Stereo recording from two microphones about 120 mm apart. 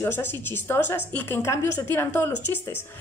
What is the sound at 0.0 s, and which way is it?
A woman's voice, 20° left (ahead or behind).